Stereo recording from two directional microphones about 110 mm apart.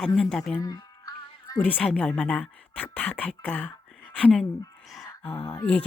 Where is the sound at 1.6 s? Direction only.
15° left (ahead or behind).